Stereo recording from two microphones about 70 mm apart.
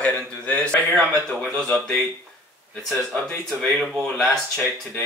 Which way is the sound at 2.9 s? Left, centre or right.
Centre.